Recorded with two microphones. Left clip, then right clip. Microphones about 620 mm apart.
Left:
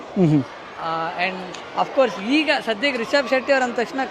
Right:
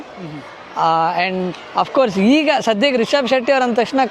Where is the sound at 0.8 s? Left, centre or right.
Right.